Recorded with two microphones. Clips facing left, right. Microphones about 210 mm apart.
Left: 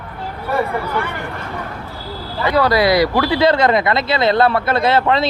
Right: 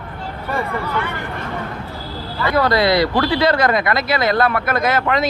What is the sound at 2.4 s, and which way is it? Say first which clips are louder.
Speech: left 2 dB; 15° left (ahead or behind).